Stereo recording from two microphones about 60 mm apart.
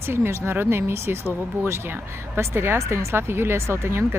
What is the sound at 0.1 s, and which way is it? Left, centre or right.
Speech, right.